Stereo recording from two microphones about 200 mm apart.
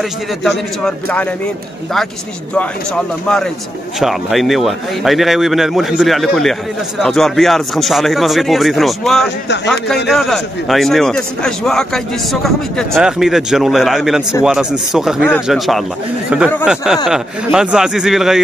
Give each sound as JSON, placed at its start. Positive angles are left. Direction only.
{"t": 0.4, "sound": "a man's voice", "side_deg": 0}
{"t": 4.0, "sound": "a man's voice", "side_deg": 0}